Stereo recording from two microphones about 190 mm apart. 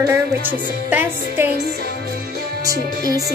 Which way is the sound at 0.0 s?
10° right (ahead or behind).